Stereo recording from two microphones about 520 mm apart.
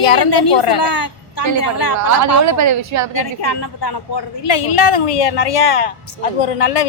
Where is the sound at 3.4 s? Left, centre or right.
Left.